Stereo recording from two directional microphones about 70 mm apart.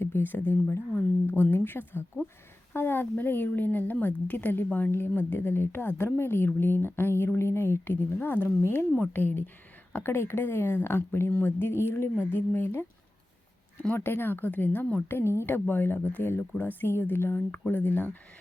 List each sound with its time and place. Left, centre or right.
0.0 s a woman's voice: left
13.9 s speech: left
15.1 s speech: left